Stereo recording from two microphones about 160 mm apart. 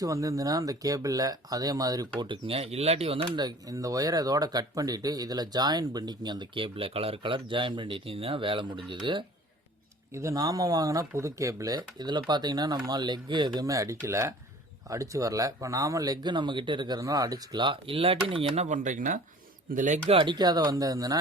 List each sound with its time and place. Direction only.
0.0 s speech: 20° right (ahead or behind); by 20.0 s 55° right (ahead or behind)
20.1 s speech: 30° right (ahead or behind)